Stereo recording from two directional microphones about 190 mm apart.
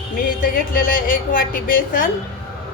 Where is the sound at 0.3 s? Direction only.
45° left (ahead or behind).